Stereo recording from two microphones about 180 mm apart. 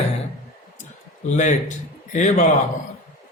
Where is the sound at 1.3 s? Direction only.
45° left (ahead or behind).